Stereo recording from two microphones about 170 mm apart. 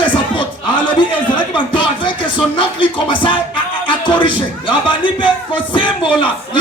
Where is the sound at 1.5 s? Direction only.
30° left (ahead or behind).